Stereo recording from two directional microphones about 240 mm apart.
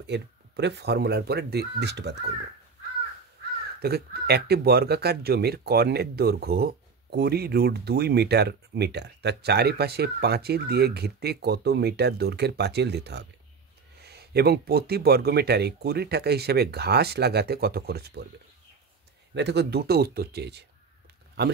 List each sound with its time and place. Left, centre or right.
0.0 s speech: right
3.8 s speech: right
19.3 s speech: right